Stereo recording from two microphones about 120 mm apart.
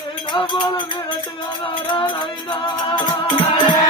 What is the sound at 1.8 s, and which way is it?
Music, 40° left (ahead or behind).